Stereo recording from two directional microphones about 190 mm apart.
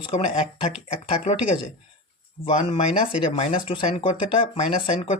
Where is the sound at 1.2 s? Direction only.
40° left (ahead or behind).